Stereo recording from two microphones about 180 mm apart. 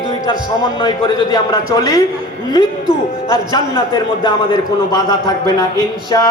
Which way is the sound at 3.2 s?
20° left (ahead or behind).